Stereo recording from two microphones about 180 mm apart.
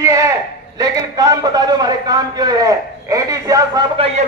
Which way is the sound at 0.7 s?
20° right (ahead or behind).